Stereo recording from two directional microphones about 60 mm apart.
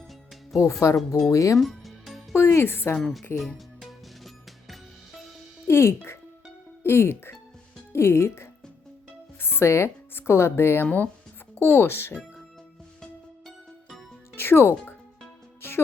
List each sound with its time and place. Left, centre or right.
0.6 s speech: left
1.3 s speech: left
1.5 s music: centre
2.3 s speech: left
3.0 s a woman's voice: centre
3.3 s music: centre
5.6 s speech: left
14.3 s music: left